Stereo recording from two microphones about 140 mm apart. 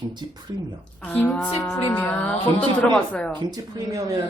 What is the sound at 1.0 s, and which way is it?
Speech, 10° left (ahead or behind).